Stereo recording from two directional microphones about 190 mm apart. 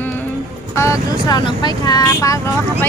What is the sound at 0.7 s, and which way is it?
Speech, 15° left (ahead or behind).